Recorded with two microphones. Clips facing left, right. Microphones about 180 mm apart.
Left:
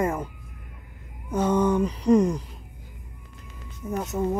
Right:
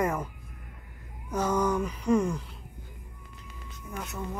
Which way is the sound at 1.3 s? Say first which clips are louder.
Left 5 dB; 25° left (ahead or behind).